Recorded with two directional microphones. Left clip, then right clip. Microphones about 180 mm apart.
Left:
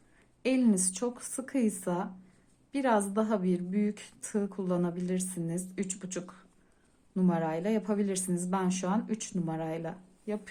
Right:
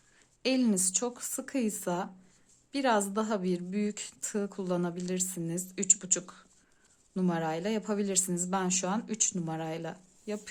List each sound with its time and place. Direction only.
0.4 s a woman's voice: 25° right (ahead or behind)